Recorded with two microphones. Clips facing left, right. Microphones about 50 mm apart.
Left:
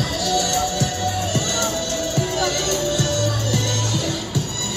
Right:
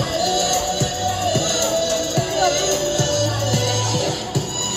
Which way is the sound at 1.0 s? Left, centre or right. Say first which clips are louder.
Right 3 dB; right.